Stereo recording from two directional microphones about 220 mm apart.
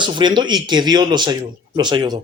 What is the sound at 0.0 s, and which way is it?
Speech, 20° right (ahead or behind).